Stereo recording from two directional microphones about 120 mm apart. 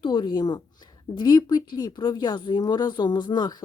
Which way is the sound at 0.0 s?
40° left (ahead or behind).